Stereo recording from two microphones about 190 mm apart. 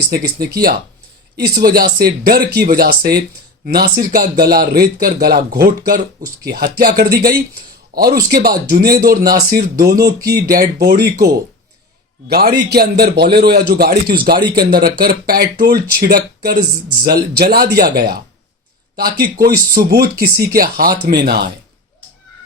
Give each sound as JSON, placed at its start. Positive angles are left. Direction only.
{"t": 0.3, "sound": "speech", "side_deg": -55}
{"t": 12.3, "sound": "a man's voice", "side_deg": -50}